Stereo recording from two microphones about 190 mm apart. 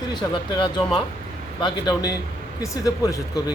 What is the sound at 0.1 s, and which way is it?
A man's voice, 20° left (ahead or behind).